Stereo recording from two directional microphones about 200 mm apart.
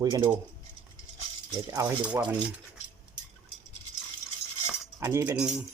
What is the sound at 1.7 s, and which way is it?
Speech, 15° right (ahead or behind).